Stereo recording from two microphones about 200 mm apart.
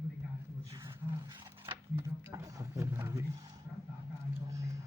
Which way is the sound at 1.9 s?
15° right (ahead or behind).